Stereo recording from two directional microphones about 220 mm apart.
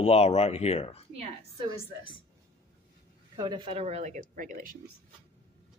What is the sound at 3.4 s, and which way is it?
Speech, 20° right (ahead or behind).